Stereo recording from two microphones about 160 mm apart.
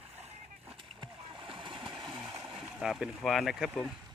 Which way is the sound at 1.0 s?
30° right (ahead or behind).